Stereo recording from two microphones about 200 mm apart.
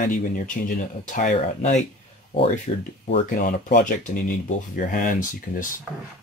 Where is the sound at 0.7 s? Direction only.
45° left (ahead or behind).